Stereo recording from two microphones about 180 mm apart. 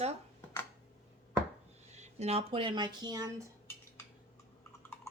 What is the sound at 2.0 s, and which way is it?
Speech, 35° right (ahead or behind).